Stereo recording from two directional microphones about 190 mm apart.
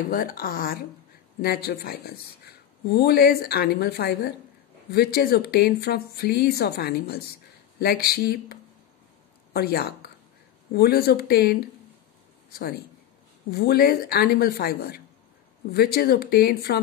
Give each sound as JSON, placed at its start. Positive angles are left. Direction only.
{"t": 0.1, "sound": "a woman's voice", "side_deg": 50}
{"t": 13.5, "sound": "a woman's voice", "side_deg": 55}